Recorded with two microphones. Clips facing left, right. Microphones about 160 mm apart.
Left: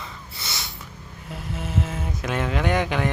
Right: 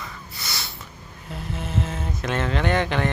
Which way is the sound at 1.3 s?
5° left (ahead or behind).